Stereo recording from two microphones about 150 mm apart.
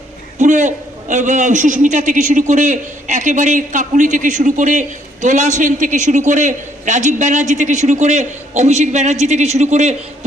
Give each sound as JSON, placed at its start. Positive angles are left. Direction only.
{"t": 0.3, "sound": "a man's voice", "side_deg": -55}